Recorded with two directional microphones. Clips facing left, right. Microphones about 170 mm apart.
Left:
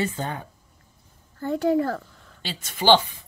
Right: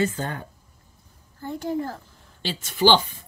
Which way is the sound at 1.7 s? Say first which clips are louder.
Left 5 dB; 90° left.